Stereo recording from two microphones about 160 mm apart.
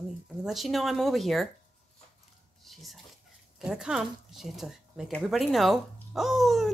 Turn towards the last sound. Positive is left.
turn(degrees=0)  # may be behind; listen again after turning